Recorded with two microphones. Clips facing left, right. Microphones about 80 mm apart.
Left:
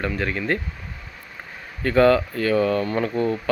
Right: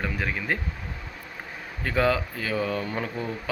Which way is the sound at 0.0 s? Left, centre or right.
Centre.